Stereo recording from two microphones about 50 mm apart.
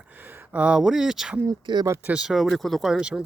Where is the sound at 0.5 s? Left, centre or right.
Right.